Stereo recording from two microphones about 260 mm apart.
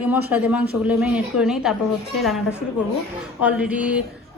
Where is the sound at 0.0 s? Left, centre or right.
Centre.